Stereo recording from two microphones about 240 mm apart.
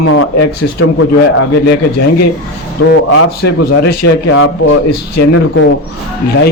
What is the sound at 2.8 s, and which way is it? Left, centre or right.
Speech, left.